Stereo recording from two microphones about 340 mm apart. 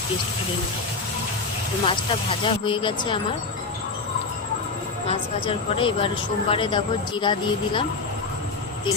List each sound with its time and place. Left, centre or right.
1.8 s speech: centre
5.0 s speech: centre